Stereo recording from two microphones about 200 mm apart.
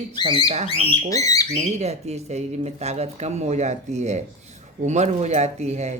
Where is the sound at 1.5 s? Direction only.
35° right (ahead or behind).